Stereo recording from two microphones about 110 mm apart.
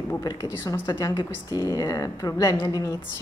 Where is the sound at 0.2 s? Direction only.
30° left (ahead or behind).